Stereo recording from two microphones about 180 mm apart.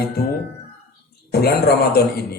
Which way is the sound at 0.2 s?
60° left (ahead or behind).